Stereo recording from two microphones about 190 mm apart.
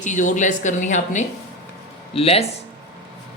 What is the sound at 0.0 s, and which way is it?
Speech, 40° left (ahead or behind).